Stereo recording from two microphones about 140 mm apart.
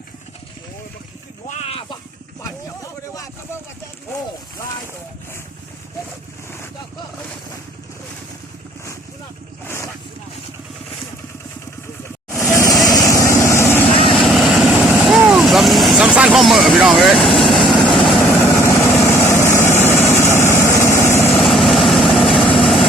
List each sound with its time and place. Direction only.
1.5 s a sound: 50° left (ahead or behind)
9.6 s boat: 20° left (ahead or behind)
12.3 s vehicle: 5° left (ahead or behind)
12.5 s vehicle: 25° left (ahead or behind)
14.1 s vehicle: centre (ahead or behind)
18.6 s vehicle: 20° left (ahead or behind)
21.3 s vehicle: centre (ahead or behind)